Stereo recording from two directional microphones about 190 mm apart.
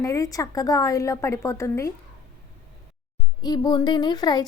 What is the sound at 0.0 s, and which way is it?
A woman's voice, 15° left (ahead or behind).